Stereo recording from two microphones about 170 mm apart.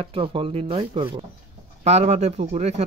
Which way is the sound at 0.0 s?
35° right (ahead or behind).